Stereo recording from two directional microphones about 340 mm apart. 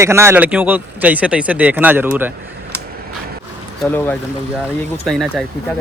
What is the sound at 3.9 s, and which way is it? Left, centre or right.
Speech, centre.